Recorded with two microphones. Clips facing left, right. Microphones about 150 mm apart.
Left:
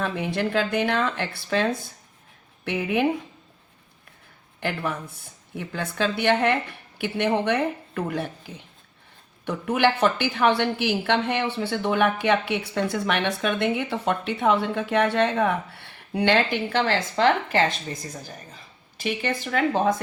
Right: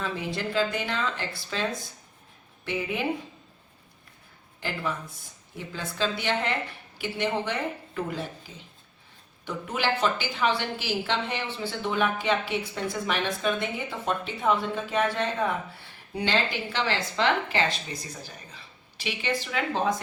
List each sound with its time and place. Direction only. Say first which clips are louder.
0.0 s a woman's voice: left 5 dB; 60° left (ahead or behind)
4.6 s a woman's voice: left 4 dB; 60° left (ahead or behind)